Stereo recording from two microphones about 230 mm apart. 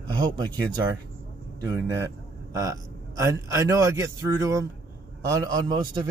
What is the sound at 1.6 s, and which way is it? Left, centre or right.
A man's voice, centre.